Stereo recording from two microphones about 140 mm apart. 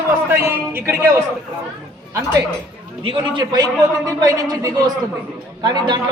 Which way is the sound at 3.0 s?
30° right (ahead or behind).